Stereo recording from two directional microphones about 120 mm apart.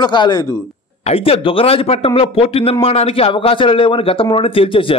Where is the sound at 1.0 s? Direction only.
55° left (ahead or behind).